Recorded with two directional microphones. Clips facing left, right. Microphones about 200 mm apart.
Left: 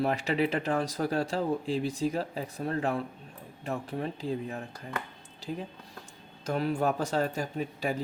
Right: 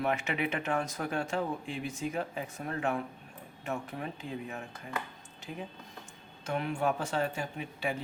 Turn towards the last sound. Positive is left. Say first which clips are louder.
# left 4 dB
turn(degrees=40)  # may be behind; listen again after turning